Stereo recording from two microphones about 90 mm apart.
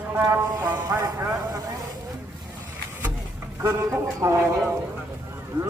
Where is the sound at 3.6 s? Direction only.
35° right (ahead or behind).